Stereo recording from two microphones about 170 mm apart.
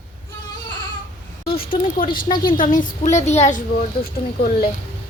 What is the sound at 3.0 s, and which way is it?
Speech, 40° left (ahead or behind).